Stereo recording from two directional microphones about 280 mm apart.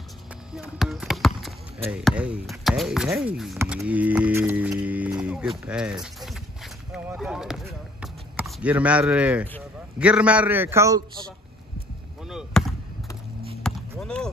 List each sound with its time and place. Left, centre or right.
0.6 s basketball bounce: centre
1.9 s speech: centre
6.2 s a sound: centre
9.9 s a man's voice: centre
12.3 s basketball bounce: centre